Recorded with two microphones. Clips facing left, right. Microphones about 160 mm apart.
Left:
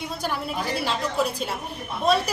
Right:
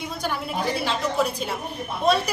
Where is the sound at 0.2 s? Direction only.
Centre (ahead or behind).